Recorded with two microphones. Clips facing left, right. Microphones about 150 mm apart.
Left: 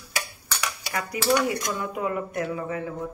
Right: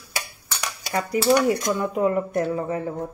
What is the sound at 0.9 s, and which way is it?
Speech, 25° right (ahead or behind).